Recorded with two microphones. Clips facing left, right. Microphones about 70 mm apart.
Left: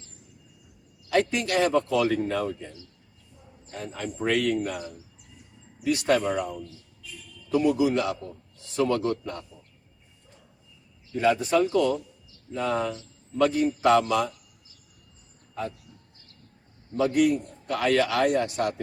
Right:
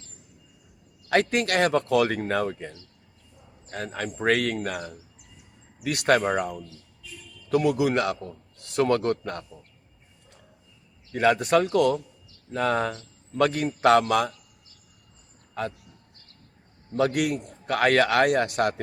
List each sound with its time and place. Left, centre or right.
1.1 s a man's voice: right
11.1 s a man's voice: right
16.9 s a man's voice: right